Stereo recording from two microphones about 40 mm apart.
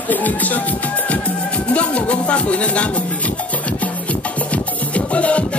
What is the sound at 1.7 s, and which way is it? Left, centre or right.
Speech, left.